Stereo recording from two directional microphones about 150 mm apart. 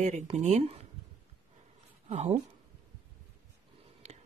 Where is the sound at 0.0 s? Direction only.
50° right (ahead or behind).